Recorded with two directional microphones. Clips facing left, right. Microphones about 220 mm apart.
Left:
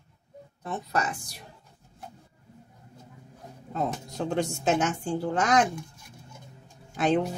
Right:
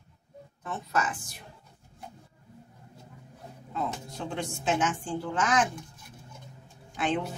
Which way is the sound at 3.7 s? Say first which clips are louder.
Left 3 dB; 40° left (ahead or behind).